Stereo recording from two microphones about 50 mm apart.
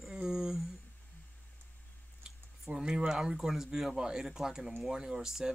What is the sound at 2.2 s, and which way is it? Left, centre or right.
Speech, centre.